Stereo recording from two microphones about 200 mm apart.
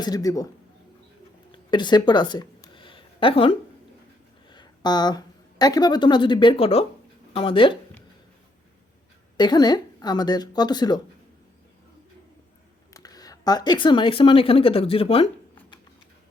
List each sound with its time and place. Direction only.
0.0 s speech: 20° left (ahead or behind)
1.5 s a sound: 20° left (ahead or behind)
4.4 s speech: 20° left (ahead or behind)
9.4 s speech: 20° left (ahead or behind)
12.9 s speech: 20° left (ahead or behind)